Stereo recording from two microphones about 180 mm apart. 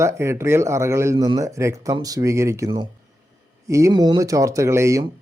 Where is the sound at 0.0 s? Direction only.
15° right (ahead or behind).